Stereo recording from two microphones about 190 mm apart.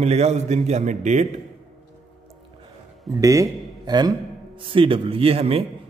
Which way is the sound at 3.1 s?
15° right (ahead or behind).